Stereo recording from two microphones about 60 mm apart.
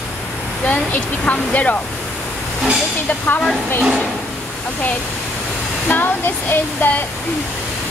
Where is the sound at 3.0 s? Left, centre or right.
Left.